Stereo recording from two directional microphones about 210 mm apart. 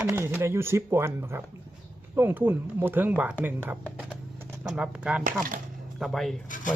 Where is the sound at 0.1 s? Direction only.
10° right (ahead or behind).